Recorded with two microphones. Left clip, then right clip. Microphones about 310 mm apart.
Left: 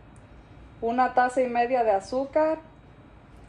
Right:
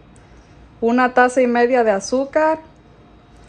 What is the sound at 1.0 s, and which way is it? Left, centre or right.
A woman's voice, right.